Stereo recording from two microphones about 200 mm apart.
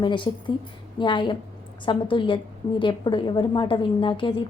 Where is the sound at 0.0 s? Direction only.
25° left (ahead or behind).